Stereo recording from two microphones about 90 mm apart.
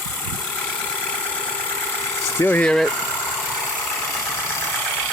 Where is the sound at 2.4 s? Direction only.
20° left (ahead or behind).